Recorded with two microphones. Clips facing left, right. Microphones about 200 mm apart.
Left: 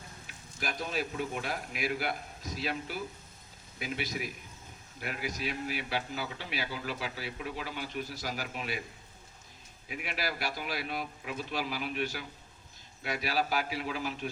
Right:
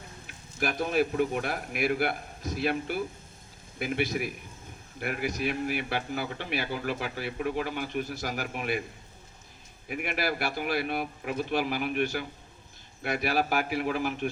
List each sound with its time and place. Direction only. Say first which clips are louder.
0.6 s a man's voice: right 8 dB; 60° right (ahead or behind)
9.9 s a man's voice: right 6 dB; 55° right (ahead or behind)